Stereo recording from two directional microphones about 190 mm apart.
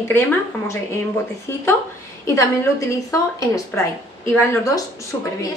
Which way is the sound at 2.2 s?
15° left (ahead or behind).